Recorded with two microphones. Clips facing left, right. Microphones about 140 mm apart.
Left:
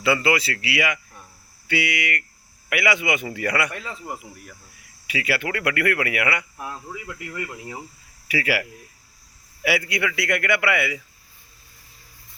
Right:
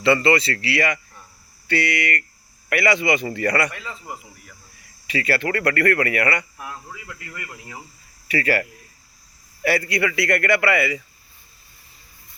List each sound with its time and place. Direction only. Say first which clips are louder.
0.0 s a man's voice: right 3 dB; 5° left (ahead or behind)
5.0 s speech: right 3 dB; 5° left (ahead or behind)
6.6 s speech: left 2 dB; 25° left (ahead or behind)
8.3 s a man's voice: right 2 dB; 5° left (ahead or behind)
9.6 s a man's voice: right 3 dB; centre (ahead or behind)